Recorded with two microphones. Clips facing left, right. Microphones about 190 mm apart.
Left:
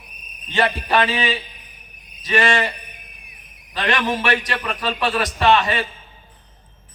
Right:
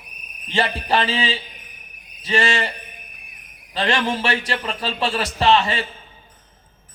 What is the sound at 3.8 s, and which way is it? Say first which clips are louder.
Speech: even; 25° right (ahead or behind).